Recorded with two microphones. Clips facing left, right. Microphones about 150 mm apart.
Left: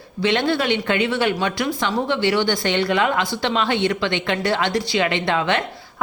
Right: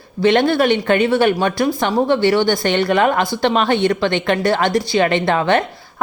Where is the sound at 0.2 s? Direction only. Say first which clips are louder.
Right 6 dB; 50° right (ahead or behind).